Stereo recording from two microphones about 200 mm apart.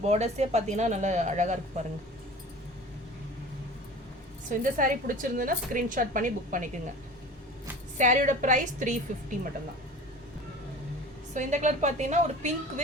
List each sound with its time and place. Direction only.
0.1 s a woman's voice: 35° right (ahead or behind)
4.4 s a woman's voice: 40° right (ahead or behind)
7.9 s a woman's voice: 40° right (ahead or behind)
11.3 s a woman's voice: 35° right (ahead or behind)